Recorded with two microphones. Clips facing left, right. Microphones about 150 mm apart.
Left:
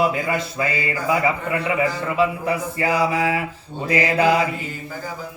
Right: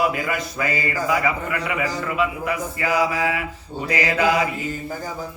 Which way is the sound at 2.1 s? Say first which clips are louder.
Left 3 dB; 35° left (ahead or behind).